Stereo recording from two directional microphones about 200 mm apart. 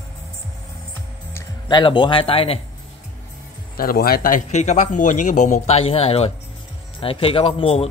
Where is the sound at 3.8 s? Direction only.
50° left (ahead or behind).